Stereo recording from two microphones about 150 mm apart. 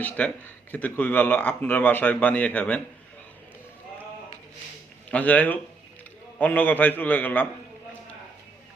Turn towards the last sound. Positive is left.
turn(degrees=10)  # may be behind; listen again after turning